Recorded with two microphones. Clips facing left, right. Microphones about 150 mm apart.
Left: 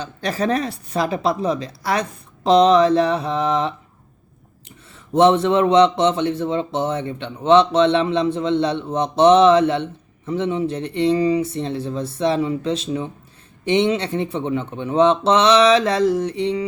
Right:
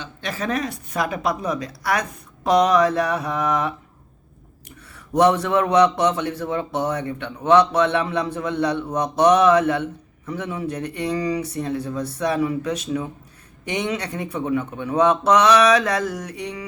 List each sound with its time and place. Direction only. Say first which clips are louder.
0.0 s a man's voice: left 6 dB; 35° left (ahead or behind)
4.9 s a man's voice: left 3 dB; 25° left (ahead or behind)